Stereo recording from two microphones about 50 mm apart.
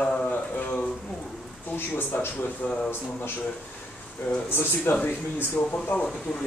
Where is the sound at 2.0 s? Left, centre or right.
Left.